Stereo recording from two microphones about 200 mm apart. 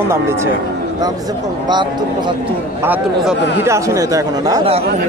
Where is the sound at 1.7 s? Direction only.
20° right (ahead or behind).